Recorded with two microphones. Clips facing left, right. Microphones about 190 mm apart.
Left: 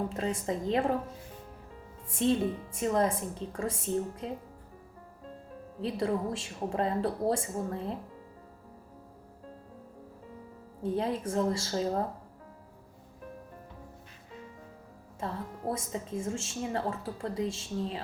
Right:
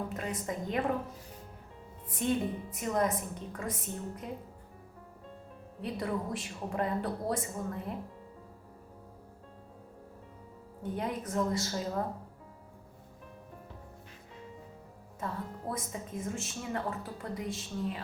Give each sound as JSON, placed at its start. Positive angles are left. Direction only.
{"t": 0.1, "sound": "speech", "side_deg": 30}
{"t": 2.0, "sound": "speech", "side_deg": 25}
{"t": 5.8, "sound": "speech", "side_deg": 25}
{"t": 10.8, "sound": "speech", "side_deg": 30}
{"t": 15.7, "sound": "speech", "side_deg": 25}